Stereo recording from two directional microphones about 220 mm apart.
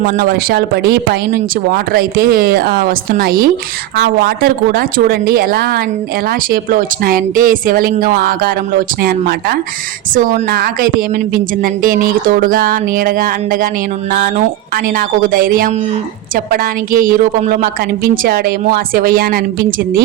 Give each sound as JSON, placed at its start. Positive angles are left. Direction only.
{"t": 0.0, "sound": "a woman's voice", "side_deg": -45}